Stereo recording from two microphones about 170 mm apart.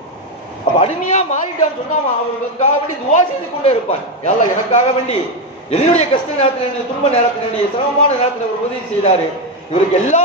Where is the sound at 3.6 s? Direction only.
40° left (ahead or behind).